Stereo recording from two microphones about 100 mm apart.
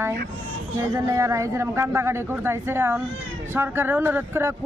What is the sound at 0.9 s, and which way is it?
Speech, 35° right (ahead or behind).